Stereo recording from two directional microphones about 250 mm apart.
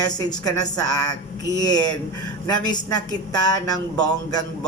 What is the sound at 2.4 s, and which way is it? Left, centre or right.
A woman's voice, centre.